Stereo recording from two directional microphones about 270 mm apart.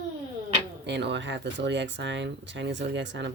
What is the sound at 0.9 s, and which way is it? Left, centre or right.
Speech, right.